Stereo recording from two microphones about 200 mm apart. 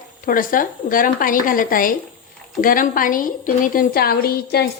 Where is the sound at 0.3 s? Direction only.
45° left (ahead or behind).